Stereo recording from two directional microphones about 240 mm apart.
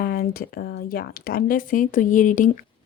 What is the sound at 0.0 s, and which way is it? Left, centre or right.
Speech, left.